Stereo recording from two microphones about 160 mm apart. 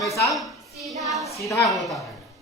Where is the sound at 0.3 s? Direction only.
Centre (ahead or behind).